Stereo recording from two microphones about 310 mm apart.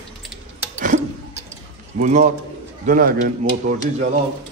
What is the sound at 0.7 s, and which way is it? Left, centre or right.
Tick-tock, right.